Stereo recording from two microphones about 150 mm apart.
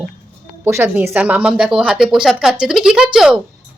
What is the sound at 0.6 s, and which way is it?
A woman's voice, 15° right (ahead or behind).